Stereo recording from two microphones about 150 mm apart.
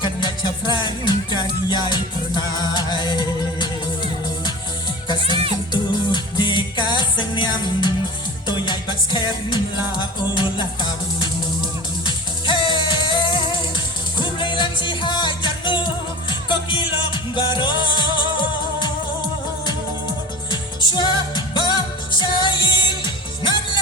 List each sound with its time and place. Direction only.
0.0 s music: 30° left (ahead or behind)
5.7 s music: 30° left (ahead or behind)
20.5 s music: 30° left (ahead or behind)